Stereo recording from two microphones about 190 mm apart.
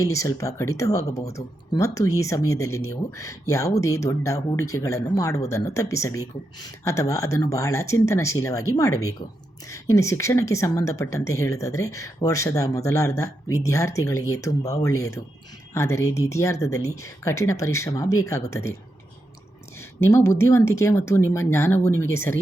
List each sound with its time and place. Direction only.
0.0 s speech: 15° left (ahead or behind)
8.9 s a woman's voice: 90° left
9.6 s speech: 15° left (ahead or behind)
20.0 s speech: 15° left (ahead or behind)